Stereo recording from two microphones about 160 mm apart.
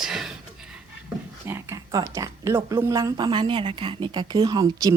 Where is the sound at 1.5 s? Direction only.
15° right (ahead or behind).